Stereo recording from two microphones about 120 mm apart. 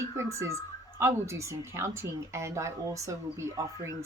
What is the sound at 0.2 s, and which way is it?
Speech, 25° right (ahead or behind).